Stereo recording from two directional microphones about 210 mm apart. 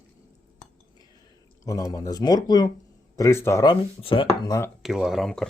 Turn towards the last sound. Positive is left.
turn(degrees=0)  # may be behind; listen again after turning